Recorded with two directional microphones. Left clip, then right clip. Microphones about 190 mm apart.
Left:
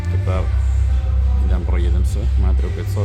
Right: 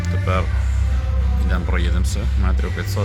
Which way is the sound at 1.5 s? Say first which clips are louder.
Right 4 dB; 10° left (ahead or behind).